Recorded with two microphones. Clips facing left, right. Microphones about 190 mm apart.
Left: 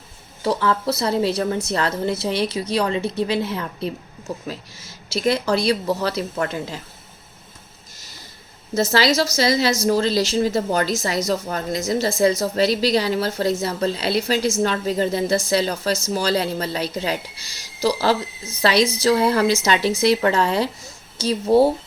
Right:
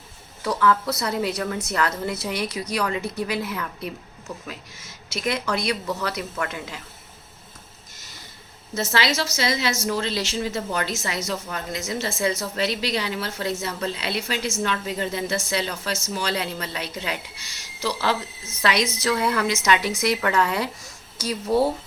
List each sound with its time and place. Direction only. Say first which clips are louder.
0.4 s a woman's voice: left 1 dB; 30° left (ahead or behind)
8.7 s a woman's voice: left 6 dB; 35° left (ahead or behind)